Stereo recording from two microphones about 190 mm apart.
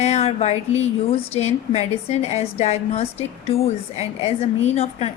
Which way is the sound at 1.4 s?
35° left (ahead or behind).